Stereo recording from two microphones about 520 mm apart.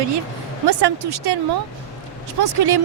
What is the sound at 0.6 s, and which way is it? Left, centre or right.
Speech, right.